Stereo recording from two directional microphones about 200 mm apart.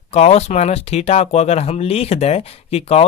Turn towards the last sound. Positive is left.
turn(degrees=30)  # may be behind; listen again after turning